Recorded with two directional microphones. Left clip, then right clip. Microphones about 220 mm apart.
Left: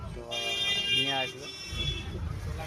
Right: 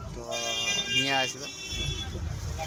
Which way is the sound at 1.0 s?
10° right (ahead or behind).